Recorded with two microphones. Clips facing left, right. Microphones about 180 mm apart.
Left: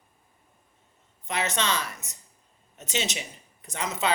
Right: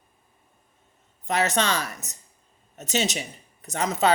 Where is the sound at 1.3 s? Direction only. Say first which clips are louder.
Right 4 dB; 40° right (ahead or behind).